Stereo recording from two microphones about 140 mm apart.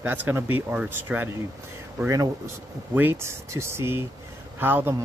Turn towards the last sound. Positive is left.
turn(degrees=-15)  # may be behind; listen again after turning